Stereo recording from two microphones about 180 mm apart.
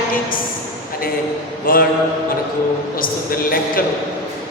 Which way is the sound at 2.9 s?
55° left (ahead or behind).